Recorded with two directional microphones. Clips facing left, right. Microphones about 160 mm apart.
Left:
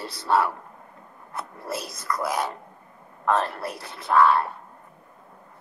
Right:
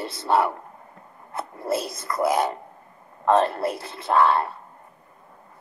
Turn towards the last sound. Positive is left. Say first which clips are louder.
# even
turn(degrees=-25)  # may be behind; listen again after turning